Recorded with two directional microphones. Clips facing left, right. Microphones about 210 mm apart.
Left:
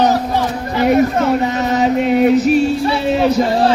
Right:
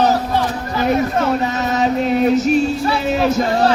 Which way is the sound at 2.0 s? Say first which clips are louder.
Left 3 dB; 5° left (ahead or behind).